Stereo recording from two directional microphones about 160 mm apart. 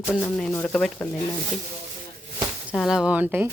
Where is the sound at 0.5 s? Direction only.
10° left (ahead or behind).